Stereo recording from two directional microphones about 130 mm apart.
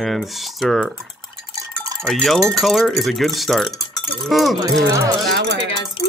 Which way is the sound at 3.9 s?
Centre (ahead or behind).